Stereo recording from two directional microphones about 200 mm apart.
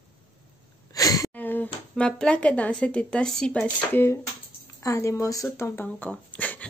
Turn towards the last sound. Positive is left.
turn(degrees=5)  # may be behind; listen again after turning